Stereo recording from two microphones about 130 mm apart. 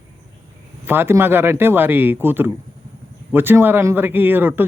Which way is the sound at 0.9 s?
15° right (ahead or behind).